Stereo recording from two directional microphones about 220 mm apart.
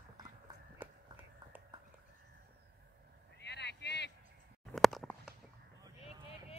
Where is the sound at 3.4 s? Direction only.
50° left (ahead or behind).